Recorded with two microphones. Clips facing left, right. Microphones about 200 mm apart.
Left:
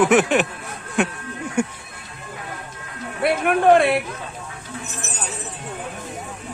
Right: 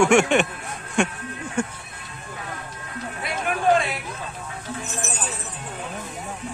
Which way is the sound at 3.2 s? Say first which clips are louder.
Left 6 dB; 60° left (ahead or behind).